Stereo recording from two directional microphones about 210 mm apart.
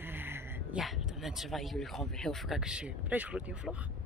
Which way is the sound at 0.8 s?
Centre (ahead or behind).